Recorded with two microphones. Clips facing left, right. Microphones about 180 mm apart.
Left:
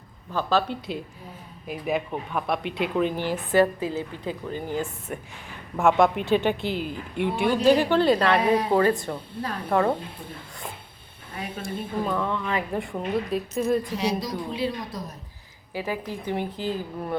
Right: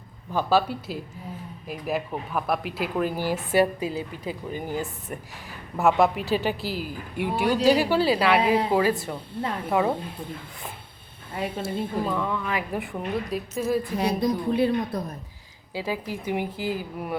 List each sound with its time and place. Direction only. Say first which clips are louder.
0.3 s a woman's voice: right 2 dB; 10° right (ahead or behind)
11.6 s a woman's voice: left 1 dB; centre (ahead or behind)
13.9 s a woman's voice: right 3 dB; 55° right (ahead or behind)
15.7 s speech: even; 15° right (ahead or behind)